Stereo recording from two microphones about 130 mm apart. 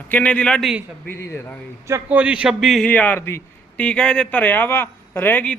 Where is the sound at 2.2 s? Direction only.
10° right (ahead or behind).